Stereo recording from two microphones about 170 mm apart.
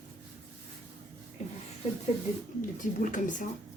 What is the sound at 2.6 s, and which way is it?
Speech, 50° left (ahead or behind).